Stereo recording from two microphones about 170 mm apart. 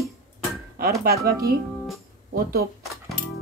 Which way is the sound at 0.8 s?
65° right (ahead or behind).